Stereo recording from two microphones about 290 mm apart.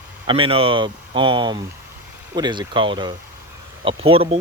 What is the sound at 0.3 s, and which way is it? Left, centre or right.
Speech, centre.